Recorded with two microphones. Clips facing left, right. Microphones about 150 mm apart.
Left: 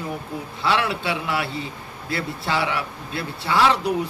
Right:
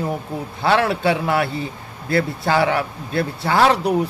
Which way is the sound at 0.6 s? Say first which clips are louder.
Right 6 dB; 45° right (ahead or behind).